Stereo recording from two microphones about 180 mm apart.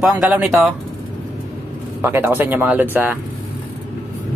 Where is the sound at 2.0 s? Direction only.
10° right (ahead or behind).